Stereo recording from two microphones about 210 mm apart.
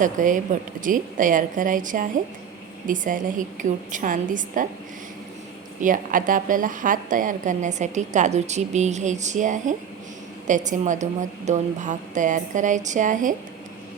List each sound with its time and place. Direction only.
0.0 s a woman's voice: 40° right (ahead or behind)
5.8 s a woman's voice: 40° right (ahead or behind)